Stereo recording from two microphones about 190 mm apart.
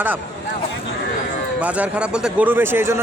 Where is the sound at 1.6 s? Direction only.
5° right (ahead or behind).